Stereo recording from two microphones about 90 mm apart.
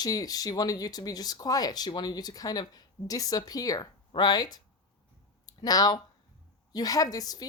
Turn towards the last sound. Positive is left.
turn(degrees=45)  # may be behind; listen again after turning